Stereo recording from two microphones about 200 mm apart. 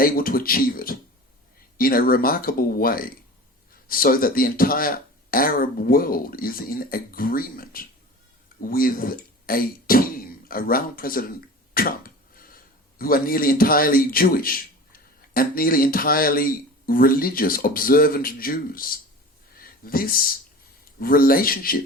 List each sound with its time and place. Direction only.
0.0 s a man's voice: 45° left (ahead or behind)